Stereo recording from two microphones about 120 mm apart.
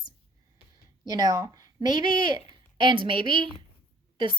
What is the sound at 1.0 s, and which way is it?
Speech, 30° right (ahead or behind).